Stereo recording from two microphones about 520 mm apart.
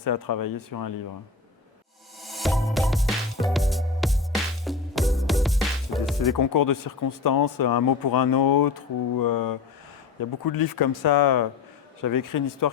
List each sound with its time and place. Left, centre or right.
0.0 s speech: left
2.2 s music: centre
6.3 s speech: left